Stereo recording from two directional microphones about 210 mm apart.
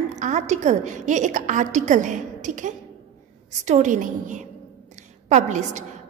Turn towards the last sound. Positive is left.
turn(degrees=-35)  # may be behind; listen again after turning